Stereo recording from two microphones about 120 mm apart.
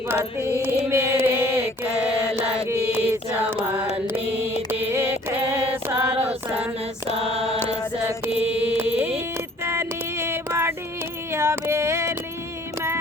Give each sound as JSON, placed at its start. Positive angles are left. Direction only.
{"t": 0.3, "sound": "female singing", "side_deg": -20}
{"t": 0.9, "sound": "mantra", "side_deg": -20}
{"t": 2.3, "sound": "chant", "side_deg": -10}
{"t": 2.6, "sound": "music", "side_deg": -20}
{"t": 4.7, "sound": "mantra", "side_deg": -20}
{"t": 6.1, "sound": "female singing", "side_deg": -10}
{"t": 7.2, "sound": "mantra", "side_deg": -55}
{"t": 8.4, "sound": "music", "side_deg": -15}
{"t": 9.6, "sound": "a sound", "side_deg": -20}